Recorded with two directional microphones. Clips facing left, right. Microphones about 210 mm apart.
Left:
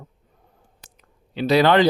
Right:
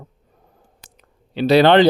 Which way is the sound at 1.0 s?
30° right (ahead or behind).